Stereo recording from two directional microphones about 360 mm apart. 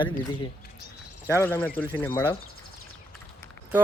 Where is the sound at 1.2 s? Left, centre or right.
Centre.